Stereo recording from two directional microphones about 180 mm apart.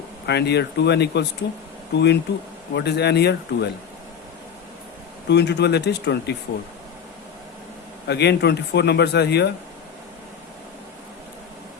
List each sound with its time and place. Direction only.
0.3 s speech: 65° left (ahead or behind)
5.3 s speech: 70° left (ahead or behind)
8.0 s speech: 65° left (ahead or behind)